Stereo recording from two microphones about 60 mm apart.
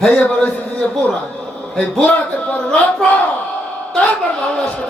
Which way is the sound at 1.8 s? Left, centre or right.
Left.